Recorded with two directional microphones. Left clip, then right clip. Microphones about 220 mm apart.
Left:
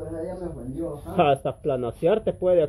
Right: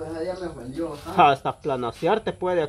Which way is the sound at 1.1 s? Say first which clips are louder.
Right 3 dB; 25° right (ahead or behind).